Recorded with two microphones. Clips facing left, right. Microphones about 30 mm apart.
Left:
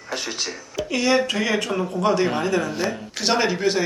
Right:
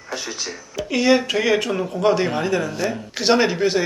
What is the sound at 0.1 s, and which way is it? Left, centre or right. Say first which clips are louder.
Speech: left 1 dB; centre.